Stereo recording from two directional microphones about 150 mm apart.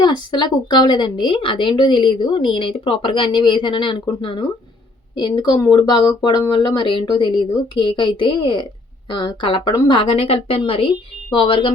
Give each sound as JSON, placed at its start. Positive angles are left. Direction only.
{"t": 0.0, "sound": "speech", "side_deg": 30}